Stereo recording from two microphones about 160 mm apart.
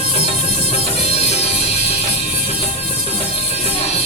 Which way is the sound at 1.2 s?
40° left (ahead or behind).